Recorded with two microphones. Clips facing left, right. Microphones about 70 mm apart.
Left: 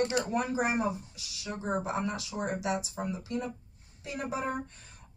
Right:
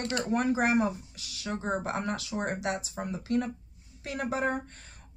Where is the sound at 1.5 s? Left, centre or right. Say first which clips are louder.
Right 1 dB; centre.